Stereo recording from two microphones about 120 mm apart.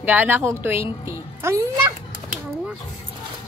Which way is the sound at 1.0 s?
20° right (ahead or behind).